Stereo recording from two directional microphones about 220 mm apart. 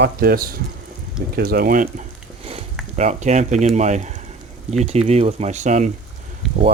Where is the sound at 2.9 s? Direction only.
35° right (ahead or behind).